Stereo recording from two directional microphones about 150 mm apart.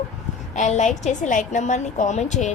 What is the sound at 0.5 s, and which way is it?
A woman's voice, 55° left (ahead or behind).